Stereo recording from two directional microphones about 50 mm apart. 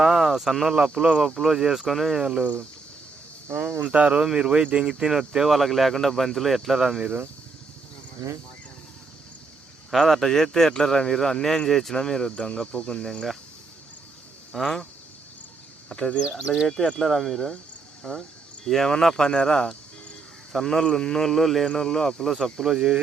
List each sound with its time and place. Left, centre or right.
0.0 s speech: centre
2.2 s speech: centre
3.6 s speech: right
3.8 s speech: right
4.2 s speech: centre
9.9 s a man's voice: centre
14.6 s a man's voice: centre
15.9 s a man's voice: centre
16.3 s speech: centre
16.7 s a man's voice: centre
17.0 s speech: centre
18.0 s cricket: centre
18.9 s a man's voice: centre
22.6 s speech: centre